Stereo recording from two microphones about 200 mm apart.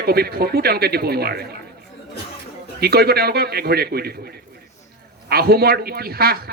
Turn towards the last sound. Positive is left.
turn(degrees=-50)  # may be behind; listen again after turning